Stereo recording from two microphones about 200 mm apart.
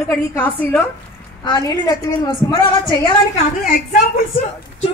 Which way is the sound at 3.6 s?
45° left (ahead or behind).